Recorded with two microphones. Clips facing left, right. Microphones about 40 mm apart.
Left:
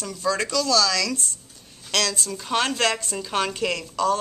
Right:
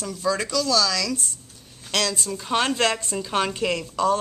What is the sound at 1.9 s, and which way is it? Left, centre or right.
Speech, centre.